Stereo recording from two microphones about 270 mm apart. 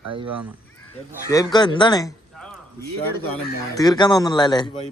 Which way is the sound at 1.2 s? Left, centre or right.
Centre.